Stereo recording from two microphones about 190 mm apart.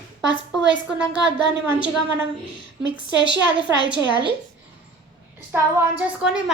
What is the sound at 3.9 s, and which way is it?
Speech, 65° right (ahead or behind).